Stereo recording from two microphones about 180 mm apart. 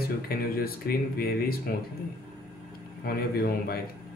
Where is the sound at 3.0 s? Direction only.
55° left (ahead or behind).